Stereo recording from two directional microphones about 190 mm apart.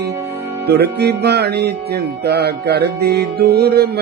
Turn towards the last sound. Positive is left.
turn(degrees=-55)  # may be behind; listen again after turning